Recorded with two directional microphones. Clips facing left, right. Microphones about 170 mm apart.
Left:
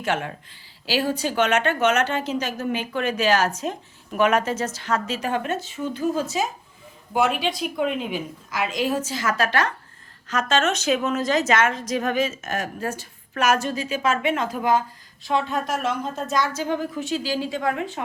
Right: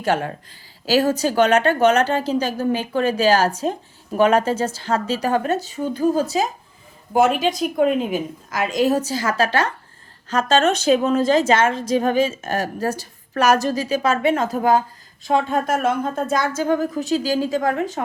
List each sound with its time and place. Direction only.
0.0 s a woman's voice: 35° right (ahead or behind)